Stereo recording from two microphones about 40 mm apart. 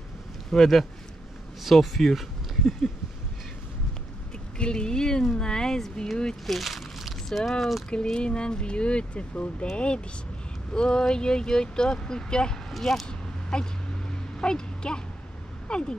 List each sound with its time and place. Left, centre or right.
0.5 s speech: centre
4.6 s speech: left
6.4 s speech: centre
7.9 s speech: left
12.7 s speech: centre
13.0 s a sound: centre
15.7 s speech: centre